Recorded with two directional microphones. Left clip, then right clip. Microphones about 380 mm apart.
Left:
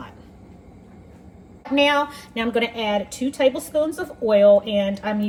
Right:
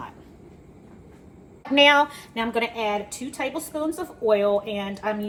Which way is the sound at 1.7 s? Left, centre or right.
Centre.